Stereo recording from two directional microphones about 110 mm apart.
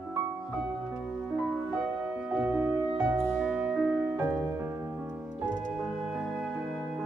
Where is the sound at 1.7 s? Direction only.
15° right (ahead or behind).